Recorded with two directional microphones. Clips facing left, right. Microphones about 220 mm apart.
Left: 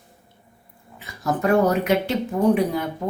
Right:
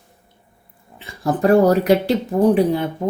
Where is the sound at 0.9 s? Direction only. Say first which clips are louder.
Right 4 dB; 30° right (ahead or behind).